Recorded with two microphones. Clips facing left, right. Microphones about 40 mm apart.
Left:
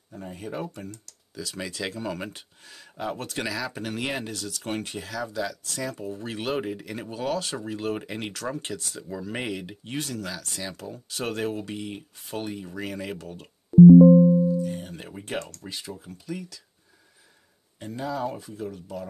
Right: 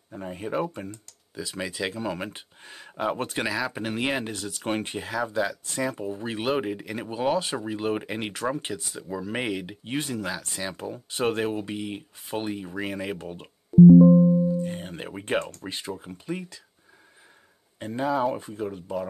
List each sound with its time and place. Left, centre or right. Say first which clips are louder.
0.1 s speech: right 5 dB; right
2.3 s speech: right 3 dB; right
9.9 s speech: right 3 dB; right
14.6 s speech: even; right
17.7 s speech: right 5 dB; right